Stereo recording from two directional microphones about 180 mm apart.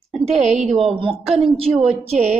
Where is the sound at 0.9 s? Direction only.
30° right (ahead or behind).